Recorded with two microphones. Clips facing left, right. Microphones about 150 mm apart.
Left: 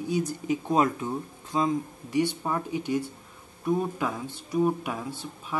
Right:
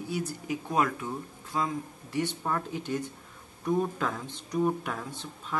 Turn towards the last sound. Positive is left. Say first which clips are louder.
# left 2 dB
turn(degrees=10)  # may be behind; listen again after turning